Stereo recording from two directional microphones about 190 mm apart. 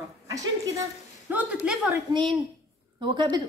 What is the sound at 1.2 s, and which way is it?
Speech, 5° right (ahead or behind).